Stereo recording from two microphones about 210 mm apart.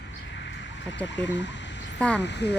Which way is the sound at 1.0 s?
60° left (ahead or behind).